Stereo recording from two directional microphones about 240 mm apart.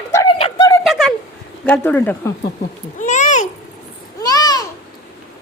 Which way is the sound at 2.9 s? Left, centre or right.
Left.